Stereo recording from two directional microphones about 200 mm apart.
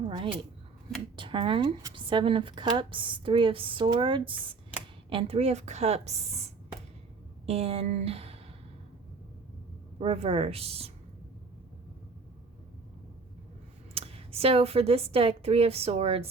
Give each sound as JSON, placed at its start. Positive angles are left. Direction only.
{"t": 0.0, "sound": "a woman's voice", "side_deg": -25}
{"t": 10.0, "sound": "speech", "side_deg": -30}
{"t": 13.9, "sound": "speech", "side_deg": -30}